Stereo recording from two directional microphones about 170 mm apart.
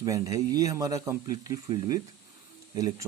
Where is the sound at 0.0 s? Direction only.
20° right (ahead or behind).